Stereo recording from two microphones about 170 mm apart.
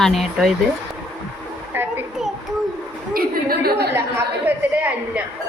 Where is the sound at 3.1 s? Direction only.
65° right (ahead or behind).